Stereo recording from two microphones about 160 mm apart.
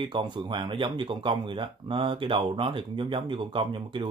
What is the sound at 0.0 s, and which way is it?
Speech, 30° right (ahead or behind).